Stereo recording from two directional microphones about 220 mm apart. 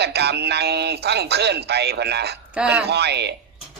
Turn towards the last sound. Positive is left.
turn(degrees=-50)  # may be behind; listen again after turning